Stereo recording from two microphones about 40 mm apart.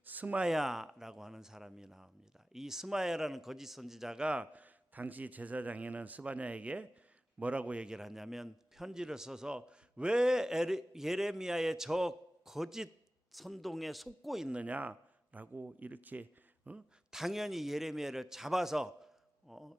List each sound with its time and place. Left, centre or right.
0.0 s a sound: right
0.4 s a man's voice: centre
4.2 s speech: right
4.5 s a man's voice: right
7.9 s a man's voice: centre
14.5 s a man's voice: right
17.1 s a man's voice: centre